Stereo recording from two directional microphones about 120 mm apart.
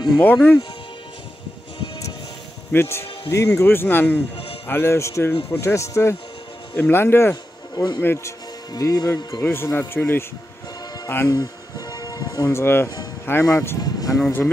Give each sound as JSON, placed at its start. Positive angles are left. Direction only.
{"t": 0.2, "sound": "speech", "side_deg": 15}
{"t": 2.7, "sound": "speech", "side_deg": 20}
{"t": 7.7, "sound": "speech", "side_deg": 35}
{"t": 8.0, "sound": "speech", "side_deg": 20}
{"t": 8.7, "sound": "speech", "side_deg": 30}
{"t": 11.2, "sound": "music", "side_deg": 30}
{"t": 13.2, "sound": "speech", "side_deg": 20}